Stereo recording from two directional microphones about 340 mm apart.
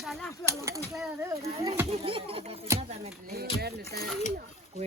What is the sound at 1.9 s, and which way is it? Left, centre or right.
Music, centre.